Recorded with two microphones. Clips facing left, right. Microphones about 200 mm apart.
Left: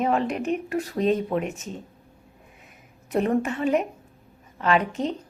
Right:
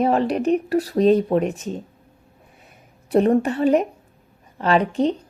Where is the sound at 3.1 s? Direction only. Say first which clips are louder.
Right 6 dB; 35° right (ahead or behind).